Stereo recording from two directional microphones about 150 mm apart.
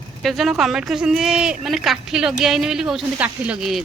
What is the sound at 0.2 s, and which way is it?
Speech, centre (ahead or behind).